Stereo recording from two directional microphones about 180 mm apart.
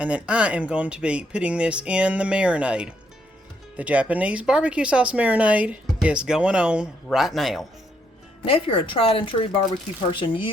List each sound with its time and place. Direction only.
0.0 s speech: 5° right (ahead or behind)
8.4 s speech: 30° left (ahead or behind)